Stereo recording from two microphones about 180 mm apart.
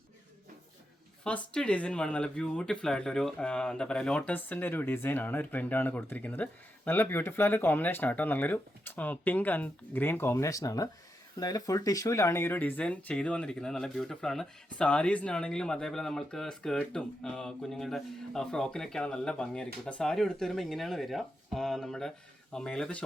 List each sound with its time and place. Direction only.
1.2 s speech: 5° left (ahead or behind)